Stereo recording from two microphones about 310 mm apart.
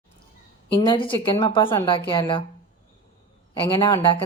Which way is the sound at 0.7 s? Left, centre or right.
Centre.